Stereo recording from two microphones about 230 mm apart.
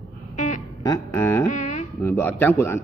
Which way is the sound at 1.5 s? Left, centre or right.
Left.